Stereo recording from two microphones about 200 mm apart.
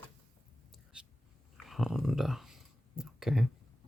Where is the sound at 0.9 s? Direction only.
5° right (ahead or behind).